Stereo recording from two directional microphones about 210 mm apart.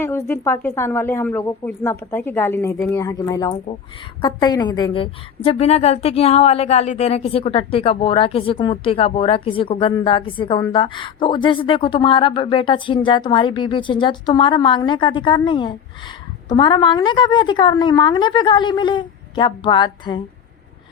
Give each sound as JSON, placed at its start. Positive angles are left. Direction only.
{"t": 0.0, "sound": "a woman's voice", "side_deg": 10}